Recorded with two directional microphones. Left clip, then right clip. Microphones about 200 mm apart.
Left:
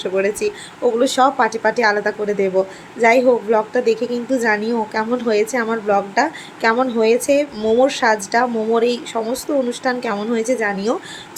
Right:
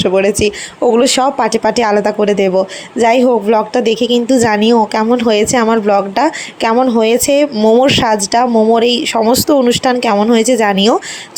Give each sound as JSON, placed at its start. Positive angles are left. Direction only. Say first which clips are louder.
{"t": 0.0, "sound": "speech", "louder": "right 8 dB", "side_deg": -35}